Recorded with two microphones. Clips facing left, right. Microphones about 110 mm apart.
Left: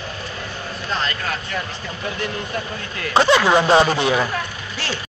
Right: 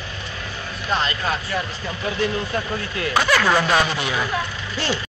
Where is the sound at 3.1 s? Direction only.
25° left (ahead or behind).